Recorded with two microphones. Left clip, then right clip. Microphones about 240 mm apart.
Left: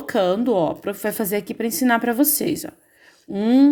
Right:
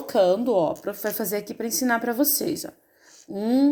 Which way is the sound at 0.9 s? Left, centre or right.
Left.